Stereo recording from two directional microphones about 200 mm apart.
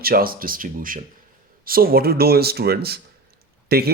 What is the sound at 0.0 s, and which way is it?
A man's voice, 45° right (ahead or behind).